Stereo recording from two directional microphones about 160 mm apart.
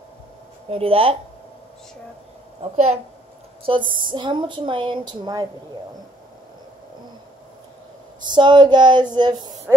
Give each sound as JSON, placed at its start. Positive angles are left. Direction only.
{"t": 0.7, "sound": "a woman's voice", "side_deg": -35}
{"t": 2.6, "sound": "a woman's voice", "side_deg": -45}
{"t": 3.6, "sound": "a woman's voice", "side_deg": -30}
{"t": 8.2, "sound": "speech", "side_deg": -30}